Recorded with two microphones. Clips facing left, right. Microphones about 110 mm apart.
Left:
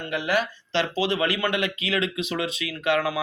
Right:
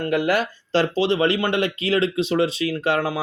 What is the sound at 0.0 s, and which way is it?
Speech, 50° right (ahead or behind).